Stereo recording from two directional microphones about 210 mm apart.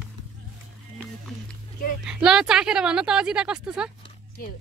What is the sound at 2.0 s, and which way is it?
Speech, 5° right (ahead or behind).